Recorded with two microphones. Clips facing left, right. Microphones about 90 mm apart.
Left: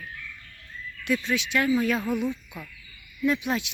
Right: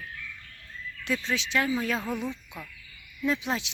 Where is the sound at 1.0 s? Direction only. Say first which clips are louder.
Left 3 dB; 30° right (ahead or behind).